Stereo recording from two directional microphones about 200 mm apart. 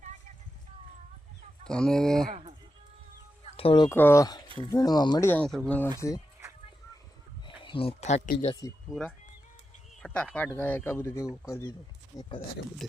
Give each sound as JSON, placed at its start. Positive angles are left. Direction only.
{"t": 1.6, "sound": "speech", "side_deg": 5}
{"t": 2.3, "sound": "a sound", "side_deg": -30}
{"t": 3.5, "sound": "a sound", "side_deg": 25}
{"t": 3.8, "sound": "speech", "side_deg": 10}
{"t": 5.3, "sound": "speech", "side_deg": 5}
{"t": 7.4, "sound": "speech", "side_deg": 25}
{"t": 8.9, "sound": "speech", "side_deg": 5}